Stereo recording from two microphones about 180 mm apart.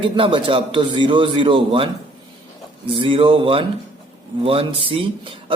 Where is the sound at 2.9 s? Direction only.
30° right (ahead or behind).